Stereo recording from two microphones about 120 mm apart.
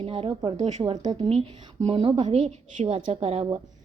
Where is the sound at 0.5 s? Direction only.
75° right (ahead or behind).